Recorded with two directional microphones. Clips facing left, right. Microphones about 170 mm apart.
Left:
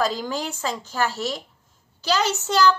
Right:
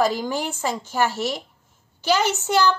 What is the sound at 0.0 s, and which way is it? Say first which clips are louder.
Speech: right 3 dB; 15° right (ahead or behind).